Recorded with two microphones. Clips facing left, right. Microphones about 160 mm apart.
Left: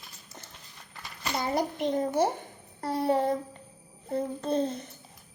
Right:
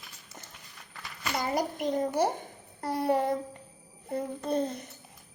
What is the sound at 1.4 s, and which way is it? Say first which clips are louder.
Speech: left 2 dB; 25° left (ahead or behind).